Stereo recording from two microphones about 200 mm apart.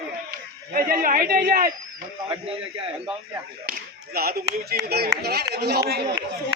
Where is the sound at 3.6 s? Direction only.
50° right (ahead or behind).